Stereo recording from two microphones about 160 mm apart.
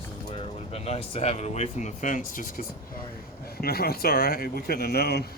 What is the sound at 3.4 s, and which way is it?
Speech, 75° left (ahead or behind).